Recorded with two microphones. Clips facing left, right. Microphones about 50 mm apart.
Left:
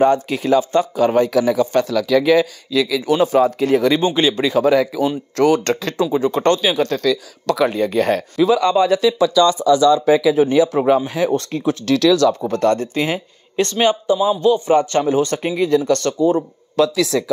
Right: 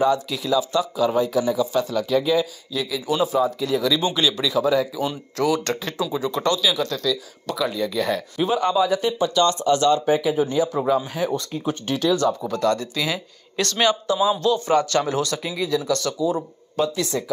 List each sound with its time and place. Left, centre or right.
0.0 s speech: left
3.1 s speech: left
3.3 s speech: left
4.0 s speech: left
4.6 s speech: left
6.1 s speech: left
7.1 s speech: left
8.5 s speech: left
12.4 s a man's voice: left
15.3 s speech: left
16.7 s speech: left